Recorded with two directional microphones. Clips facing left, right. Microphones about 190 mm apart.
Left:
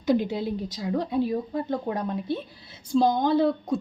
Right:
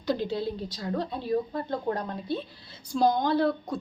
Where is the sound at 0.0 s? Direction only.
15° left (ahead or behind).